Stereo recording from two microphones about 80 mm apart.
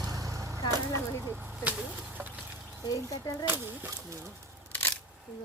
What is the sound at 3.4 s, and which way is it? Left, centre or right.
Speech, right.